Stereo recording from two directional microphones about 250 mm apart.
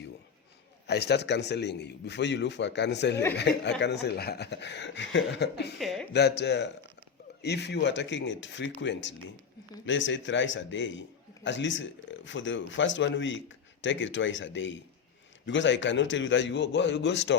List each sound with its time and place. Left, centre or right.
0.9 s speech: left
5.8 s speech: centre
6.1 s speech: left